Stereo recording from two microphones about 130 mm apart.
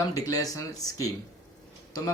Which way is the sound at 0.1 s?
25° left (ahead or behind).